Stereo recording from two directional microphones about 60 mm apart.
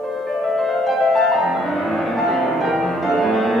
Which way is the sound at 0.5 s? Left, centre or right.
Centre.